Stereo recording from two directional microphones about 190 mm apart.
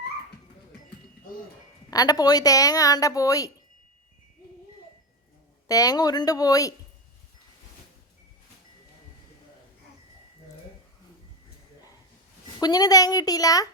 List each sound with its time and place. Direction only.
1.9 s a woman's voice: 20° left (ahead or behind)
5.6 s a woman's voice: 20° left (ahead or behind)
12.5 s a woman's voice: 20° left (ahead or behind)